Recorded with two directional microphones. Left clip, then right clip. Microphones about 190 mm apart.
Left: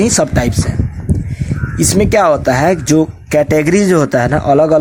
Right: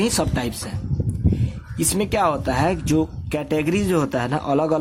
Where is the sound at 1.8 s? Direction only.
25° left (ahead or behind).